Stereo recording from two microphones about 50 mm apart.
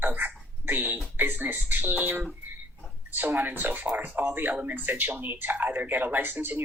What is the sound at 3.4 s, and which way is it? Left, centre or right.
Speech, right.